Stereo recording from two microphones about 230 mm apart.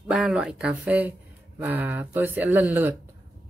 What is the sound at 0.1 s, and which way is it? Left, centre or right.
Speech, centre.